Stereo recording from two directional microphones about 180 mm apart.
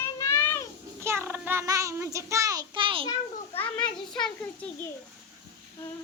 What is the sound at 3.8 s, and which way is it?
Speech, 5° left (ahead or behind).